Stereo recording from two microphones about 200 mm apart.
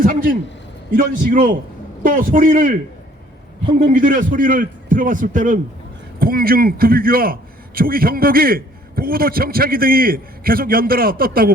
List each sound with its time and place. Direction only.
0.0 s a man's voice: 45° right (ahead or behind)
3.9 s a man's voice: 45° right (ahead or behind)